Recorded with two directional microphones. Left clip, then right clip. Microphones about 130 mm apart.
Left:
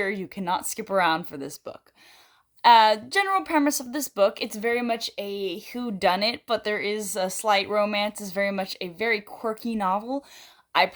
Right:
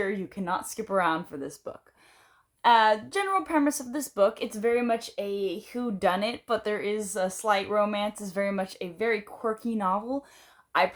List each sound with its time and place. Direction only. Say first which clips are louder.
0.0 s a woman's voice: left 3 dB; 35° left (ahead or behind)